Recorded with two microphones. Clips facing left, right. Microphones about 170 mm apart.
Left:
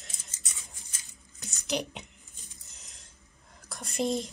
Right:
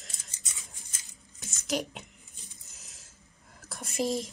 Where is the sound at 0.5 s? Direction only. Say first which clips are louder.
Even; centre (ahead or behind).